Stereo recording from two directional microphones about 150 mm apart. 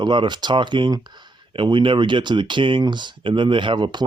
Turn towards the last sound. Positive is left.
turn(degrees=-30)  # may be behind; listen again after turning